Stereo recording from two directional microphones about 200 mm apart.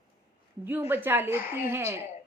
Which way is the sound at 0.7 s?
10° right (ahead or behind).